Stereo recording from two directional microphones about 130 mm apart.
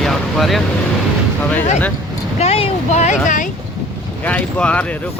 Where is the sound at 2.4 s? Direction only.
55° left (ahead or behind); by 3.4 s 80° left.